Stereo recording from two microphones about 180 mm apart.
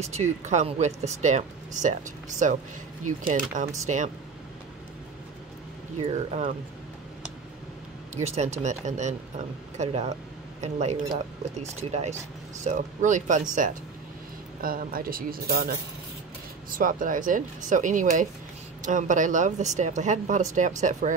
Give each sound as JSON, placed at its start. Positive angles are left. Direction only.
{"t": 0.0, "sound": "speech", "side_deg": -40}
{"t": 5.9, "sound": "speech", "side_deg": -35}
{"t": 8.1, "sound": "speech", "side_deg": -40}
{"t": 16.7, "sound": "speech", "side_deg": -50}